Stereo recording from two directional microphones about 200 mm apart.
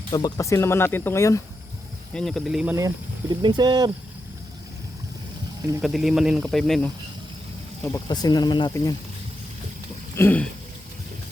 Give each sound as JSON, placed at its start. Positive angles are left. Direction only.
{"t": 0.1, "sound": "speech", "side_deg": 20}
{"t": 2.1, "sound": "speech", "side_deg": 0}
{"t": 2.7, "sound": "speech", "side_deg": -20}
{"t": 5.8, "sound": "speech", "side_deg": 0}
{"t": 8.0, "sound": "speech", "side_deg": 20}
{"t": 10.2, "sound": "speech", "side_deg": 10}